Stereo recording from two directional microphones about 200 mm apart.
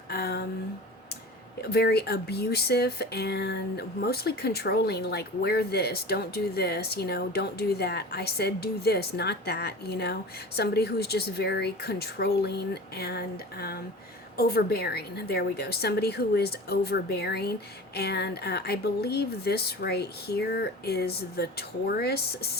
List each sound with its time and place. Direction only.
0.1 s speech: 50° left (ahead or behind)
1.6 s speech: 55° left (ahead or behind)